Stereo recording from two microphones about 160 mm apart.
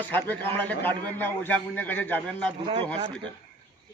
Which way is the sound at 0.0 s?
10° left (ahead or behind).